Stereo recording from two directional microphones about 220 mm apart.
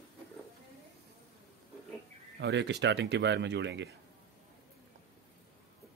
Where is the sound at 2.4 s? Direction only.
50° right (ahead or behind).